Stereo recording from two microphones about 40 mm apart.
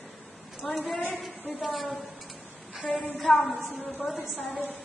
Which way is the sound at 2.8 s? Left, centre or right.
Left.